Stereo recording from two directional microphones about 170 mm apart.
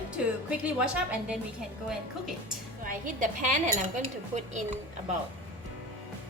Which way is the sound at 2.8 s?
50° right (ahead or behind).